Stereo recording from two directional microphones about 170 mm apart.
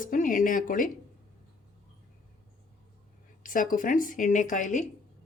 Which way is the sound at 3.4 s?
50° left (ahead or behind).